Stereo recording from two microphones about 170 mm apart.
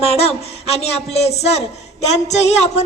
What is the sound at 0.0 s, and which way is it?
Music, 35° left (ahead or behind).